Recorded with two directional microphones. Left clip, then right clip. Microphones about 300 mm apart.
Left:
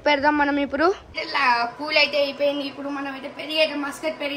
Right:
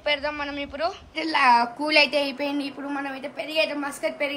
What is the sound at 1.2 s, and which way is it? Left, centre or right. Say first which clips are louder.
A woman's voice: right 4 dB; right.